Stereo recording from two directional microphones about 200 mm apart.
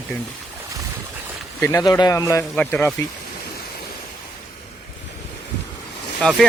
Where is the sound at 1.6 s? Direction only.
15° left (ahead or behind).